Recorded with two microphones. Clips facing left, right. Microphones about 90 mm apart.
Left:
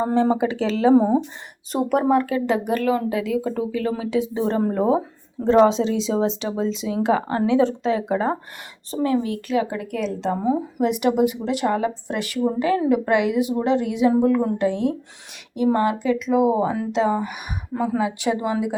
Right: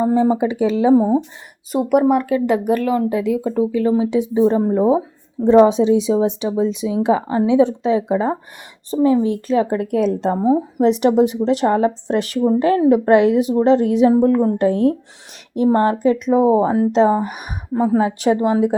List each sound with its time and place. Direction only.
0.0 s speech: 10° right (ahead or behind); by 9.6 s 30° right (ahead or behind)
9.6 s speech: 45° right (ahead or behind)
10.4 s speech: 30° right (ahead or behind)